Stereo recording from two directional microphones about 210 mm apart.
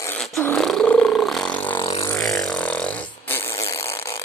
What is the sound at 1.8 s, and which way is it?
Vehicle, 20° left (ahead or behind).